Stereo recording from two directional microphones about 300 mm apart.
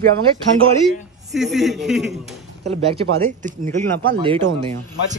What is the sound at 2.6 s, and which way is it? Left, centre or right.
Speech, right.